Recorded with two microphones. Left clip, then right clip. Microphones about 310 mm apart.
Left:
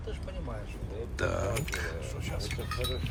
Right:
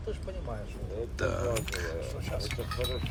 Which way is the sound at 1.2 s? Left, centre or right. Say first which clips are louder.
Even; centre.